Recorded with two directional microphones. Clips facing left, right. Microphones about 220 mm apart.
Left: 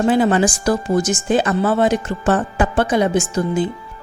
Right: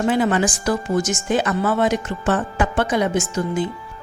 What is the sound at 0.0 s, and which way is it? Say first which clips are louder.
A woman's voice: left 3 dB; 35° left (ahead or behind).